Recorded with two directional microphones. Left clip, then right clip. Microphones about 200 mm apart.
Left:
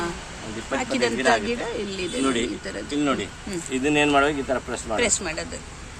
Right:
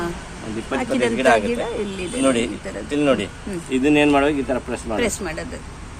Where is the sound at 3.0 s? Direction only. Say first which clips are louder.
Right 6 dB; 40° right (ahead or behind).